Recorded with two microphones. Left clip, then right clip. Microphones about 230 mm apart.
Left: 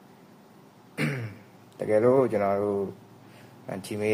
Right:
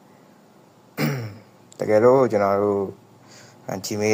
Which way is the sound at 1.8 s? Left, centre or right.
Centre.